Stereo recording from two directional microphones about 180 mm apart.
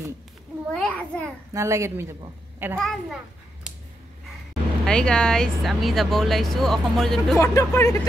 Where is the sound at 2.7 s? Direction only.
Centre (ahead or behind).